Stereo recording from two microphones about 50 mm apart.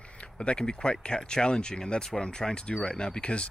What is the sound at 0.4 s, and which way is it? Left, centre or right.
Speech, centre.